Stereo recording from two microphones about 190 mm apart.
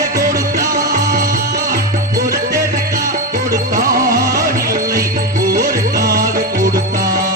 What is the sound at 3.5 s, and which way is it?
Music, 15° right (ahead or behind).